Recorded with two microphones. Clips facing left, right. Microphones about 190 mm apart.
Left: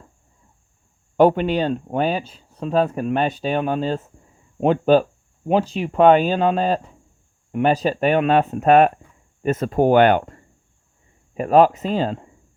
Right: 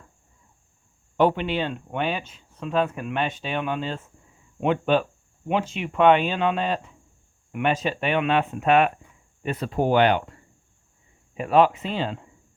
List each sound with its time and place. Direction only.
1.1 s speech: 45° left (ahead or behind)